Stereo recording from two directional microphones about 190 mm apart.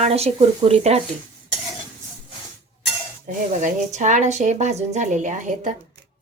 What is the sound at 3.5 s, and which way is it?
Speech, 40° right (ahead or behind).